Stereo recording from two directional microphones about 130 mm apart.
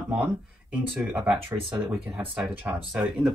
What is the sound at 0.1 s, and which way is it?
Speech, 10° right (ahead or behind).